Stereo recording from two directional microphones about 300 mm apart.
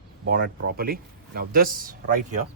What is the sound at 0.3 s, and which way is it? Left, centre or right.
Speech, right.